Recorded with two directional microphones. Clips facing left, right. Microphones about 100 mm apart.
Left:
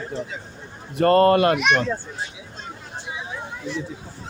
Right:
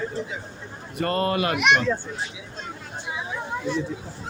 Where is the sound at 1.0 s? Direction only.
45° left (ahead or behind).